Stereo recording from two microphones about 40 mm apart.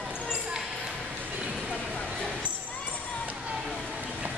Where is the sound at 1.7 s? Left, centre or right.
Left.